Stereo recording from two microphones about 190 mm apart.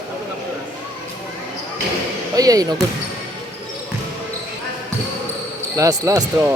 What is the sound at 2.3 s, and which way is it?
Basketball bounce, 20° right (ahead or behind).